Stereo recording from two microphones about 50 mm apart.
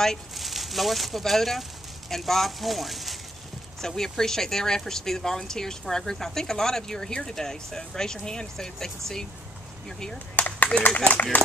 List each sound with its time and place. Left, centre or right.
0.3 s speech: centre
3.8 s speech: centre
10.1 s a sound: left
11.3 s speech: left